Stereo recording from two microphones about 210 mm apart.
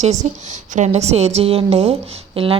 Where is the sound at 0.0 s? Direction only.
35° right (ahead or behind).